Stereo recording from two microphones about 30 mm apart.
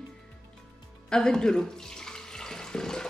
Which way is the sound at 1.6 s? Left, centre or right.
Centre.